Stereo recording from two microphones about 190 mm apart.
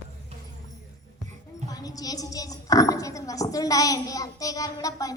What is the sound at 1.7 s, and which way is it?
A woman's voice, 20° left (ahead or behind).